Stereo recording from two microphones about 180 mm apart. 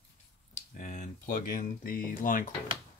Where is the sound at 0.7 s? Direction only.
40° left (ahead or behind).